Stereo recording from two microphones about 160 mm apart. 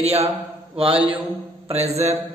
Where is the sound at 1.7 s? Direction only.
40° right (ahead or behind).